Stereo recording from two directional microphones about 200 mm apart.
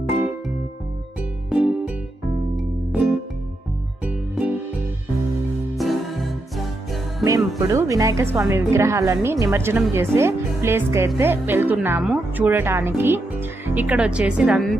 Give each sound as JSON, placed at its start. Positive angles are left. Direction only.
{"t": 1.5, "sound": "music", "side_deg": -5}
{"t": 5.7, "sound": "music", "side_deg": 0}
{"t": 7.3, "sound": "speech", "side_deg": -15}